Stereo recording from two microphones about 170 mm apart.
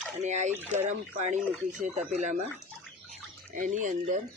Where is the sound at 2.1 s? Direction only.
45° right (ahead or behind).